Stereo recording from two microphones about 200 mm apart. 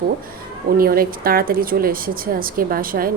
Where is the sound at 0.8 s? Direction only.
45° right (ahead or behind).